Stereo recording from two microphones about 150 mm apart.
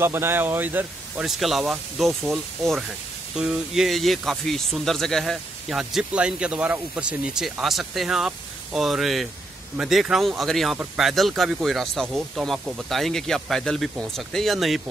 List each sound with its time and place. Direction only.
0.0 s speech: 15° right (ahead or behind); by 14.8 s centre (ahead or behind)